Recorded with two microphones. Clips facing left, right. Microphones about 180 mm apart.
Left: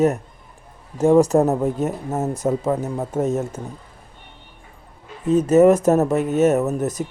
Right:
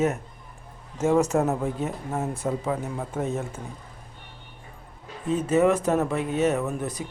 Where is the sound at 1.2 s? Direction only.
35° left (ahead or behind).